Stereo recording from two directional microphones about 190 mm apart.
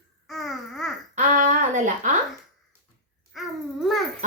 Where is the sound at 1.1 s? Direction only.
40° right (ahead or behind).